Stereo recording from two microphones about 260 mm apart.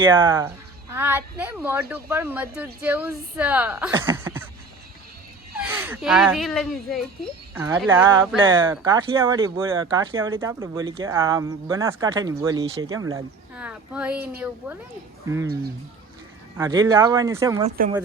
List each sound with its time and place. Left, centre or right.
0.1 s speech: centre
5.5 s speech: centre
16.6 s speech: centre
17.8 s speech: right